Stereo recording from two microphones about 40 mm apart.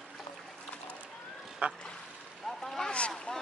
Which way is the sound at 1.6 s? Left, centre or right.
Right.